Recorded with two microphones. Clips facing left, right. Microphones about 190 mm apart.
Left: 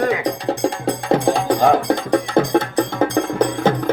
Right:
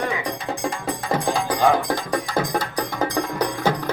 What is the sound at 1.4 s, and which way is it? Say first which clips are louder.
Music: left 4 dB; 50° left (ahead or behind).